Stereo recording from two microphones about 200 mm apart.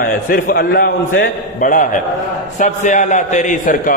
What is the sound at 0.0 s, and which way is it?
A man's voice, 50° left (ahead or behind).